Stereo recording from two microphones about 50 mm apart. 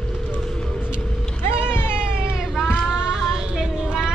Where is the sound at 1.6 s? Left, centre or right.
Left.